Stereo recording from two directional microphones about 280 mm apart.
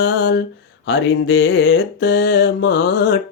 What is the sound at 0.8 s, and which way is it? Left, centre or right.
Mantra, left.